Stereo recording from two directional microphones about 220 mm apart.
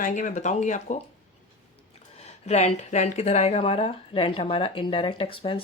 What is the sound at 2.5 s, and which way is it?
Speech, 30° left (ahead or behind).